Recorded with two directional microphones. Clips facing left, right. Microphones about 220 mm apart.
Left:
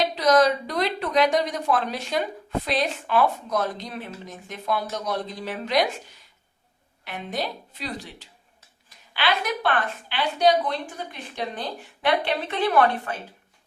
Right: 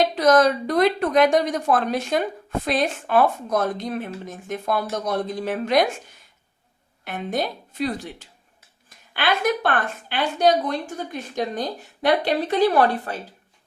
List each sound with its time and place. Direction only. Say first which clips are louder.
0.2 s a woman's voice: right 1 dB; 50° right (ahead or behind)
7.0 s a woman's voice: right 4 dB; 50° right (ahead or behind)